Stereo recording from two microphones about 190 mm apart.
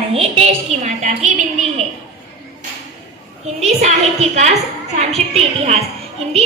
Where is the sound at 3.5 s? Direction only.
35° right (ahead or behind).